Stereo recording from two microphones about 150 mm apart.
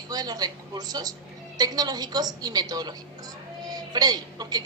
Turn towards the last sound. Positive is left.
turn(degrees=-25)  # may be behind; listen again after turning